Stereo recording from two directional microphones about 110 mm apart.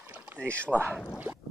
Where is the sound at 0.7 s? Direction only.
20° right (ahead or behind).